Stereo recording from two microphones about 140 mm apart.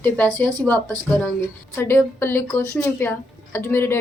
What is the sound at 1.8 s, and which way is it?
Speech, 15° left (ahead or behind).